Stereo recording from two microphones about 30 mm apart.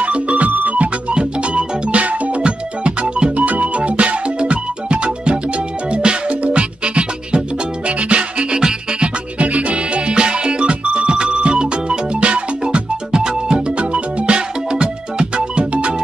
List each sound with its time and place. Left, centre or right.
0.0 s music: right
0.5 s music: right
1.1 s music: right
1.9 s music: right
3.3 s music: right
9.4 s music: right
10.0 s music: right
12.2 s music: right
12.6 s music: right